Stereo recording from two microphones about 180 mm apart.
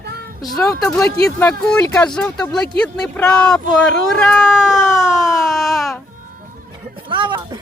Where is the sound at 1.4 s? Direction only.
10° left (ahead or behind).